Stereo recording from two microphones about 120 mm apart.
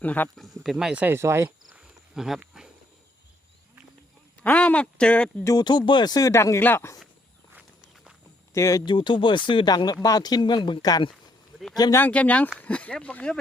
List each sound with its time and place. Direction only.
0.0 s speech: 15° left (ahead or behind)
0.3 s speech: centre (ahead or behind)
1.0 s cricket: 20° right (ahead or behind)
1.7 s a sound: 5° right (ahead or behind)
2.4 s speech: 5° right (ahead or behind)
4.4 s speech: 10° left (ahead or behind)
5.5 s speech: 35° left (ahead or behind); by 6.9 s 20° left (ahead or behind)
7.5 s walk: 10° right (ahead or behind)
8.5 s speech: 25° left (ahead or behind)
8.9 s speech: 40° left (ahead or behind)
11.9 s speech: 15° left (ahead or behind)